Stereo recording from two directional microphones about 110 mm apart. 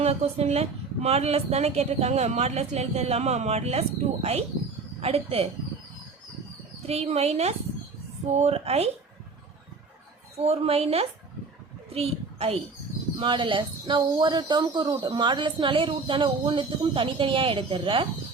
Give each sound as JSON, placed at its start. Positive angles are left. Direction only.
{"t": 0.0, "sound": "a woman's voice", "side_deg": -70}
{"t": 6.8, "sound": "a woman's voice", "side_deg": -65}
{"t": 10.3, "sound": "a woman's voice", "side_deg": -70}
{"t": 11.9, "sound": "a sound", "side_deg": -65}
{"t": 13.1, "sound": "speech", "side_deg": -50}